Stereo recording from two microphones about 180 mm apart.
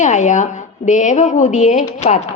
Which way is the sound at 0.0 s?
40° left (ahead or behind).